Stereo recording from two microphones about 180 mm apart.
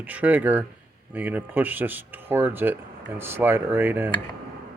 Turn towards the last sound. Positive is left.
turn(degrees=-10)  # may be behind; listen again after turning